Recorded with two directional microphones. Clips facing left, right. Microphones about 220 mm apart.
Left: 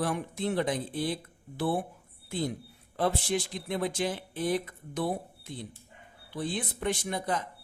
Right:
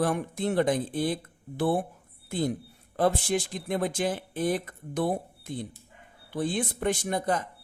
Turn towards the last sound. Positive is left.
turn(degrees=-50)  # may be behind; listen again after turning